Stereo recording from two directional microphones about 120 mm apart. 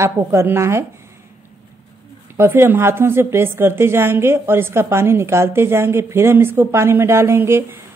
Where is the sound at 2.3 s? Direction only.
20° right (ahead or behind).